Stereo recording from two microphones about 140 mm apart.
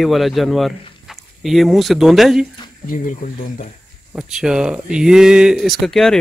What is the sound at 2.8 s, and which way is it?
Speech, 75° left (ahead or behind).